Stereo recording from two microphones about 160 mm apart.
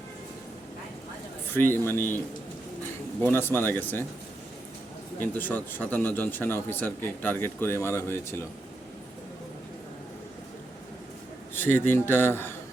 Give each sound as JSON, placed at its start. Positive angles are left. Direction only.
{"t": 1.5, "sound": "speech", "side_deg": 15}
{"t": 5.2, "sound": "speech", "side_deg": 10}
{"t": 11.5, "sound": "speech", "side_deg": 10}